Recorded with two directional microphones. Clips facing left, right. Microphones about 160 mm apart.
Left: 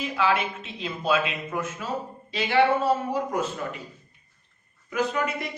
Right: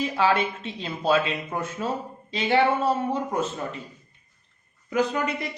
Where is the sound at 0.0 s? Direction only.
35° right (ahead or behind).